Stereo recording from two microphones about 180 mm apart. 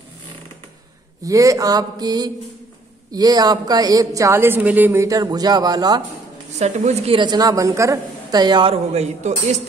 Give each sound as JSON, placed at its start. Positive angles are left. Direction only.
{"t": 1.2, "sound": "a woman's voice", "side_deg": -20}
{"t": 6.6, "sound": "a woman's voice", "side_deg": -40}